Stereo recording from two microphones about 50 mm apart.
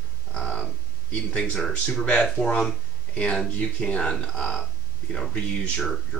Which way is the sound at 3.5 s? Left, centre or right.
Left.